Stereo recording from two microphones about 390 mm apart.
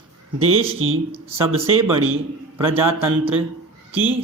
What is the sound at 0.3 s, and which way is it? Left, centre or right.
Speech, right.